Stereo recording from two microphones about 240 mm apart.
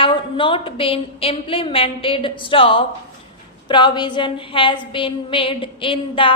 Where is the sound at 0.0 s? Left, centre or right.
Left.